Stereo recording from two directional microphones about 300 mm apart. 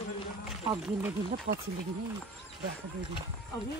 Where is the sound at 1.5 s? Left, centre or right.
Right.